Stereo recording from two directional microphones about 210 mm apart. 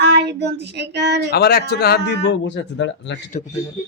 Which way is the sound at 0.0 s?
55° right (ahead or behind).